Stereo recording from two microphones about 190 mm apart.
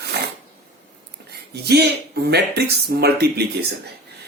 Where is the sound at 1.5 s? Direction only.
60° right (ahead or behind).